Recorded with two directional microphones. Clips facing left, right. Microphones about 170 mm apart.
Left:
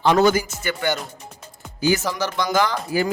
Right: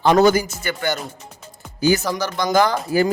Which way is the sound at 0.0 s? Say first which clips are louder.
Right 2 dB; 40° right (ahead or behind).